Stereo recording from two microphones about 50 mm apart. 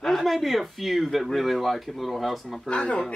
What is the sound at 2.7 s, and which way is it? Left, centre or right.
Speech, left.